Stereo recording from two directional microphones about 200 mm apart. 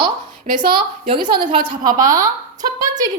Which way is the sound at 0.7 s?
25° right (ahead or behind).